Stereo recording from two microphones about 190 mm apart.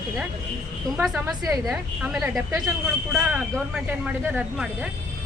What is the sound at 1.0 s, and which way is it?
Speech, centre (ahead or behind).